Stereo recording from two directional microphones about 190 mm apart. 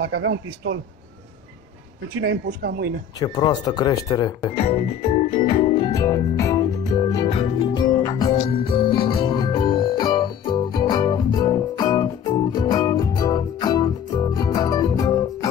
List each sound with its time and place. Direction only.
0.0 s speech: 70° right (ahead or behind)
2.2 s speech: 60° right (ahead or behind)
3.2 s speech: 20° left (ahead or behind)
4.6 s organ: 30° left (ahead or behind)
5.9 s music: 15° left (ahead or behind)